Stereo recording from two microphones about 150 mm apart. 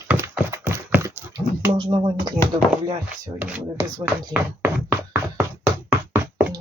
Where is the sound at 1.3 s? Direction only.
25° right (ahead or behind).